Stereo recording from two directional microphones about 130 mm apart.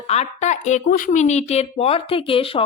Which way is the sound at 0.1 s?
60° left (ahead or behind).